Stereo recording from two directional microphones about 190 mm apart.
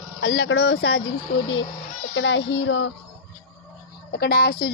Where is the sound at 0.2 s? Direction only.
70° left (ahead or behind).